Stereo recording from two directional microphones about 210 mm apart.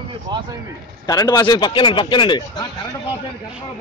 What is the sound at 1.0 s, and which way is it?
Speech, 15° left (ahead or behind).